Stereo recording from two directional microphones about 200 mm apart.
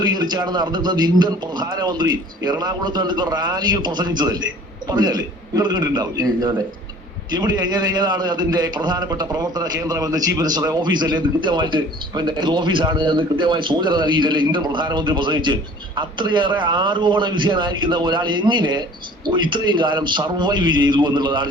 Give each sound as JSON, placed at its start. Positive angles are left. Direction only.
{"t": 0.0, "sound": "a man's voice", "side_deg": -20}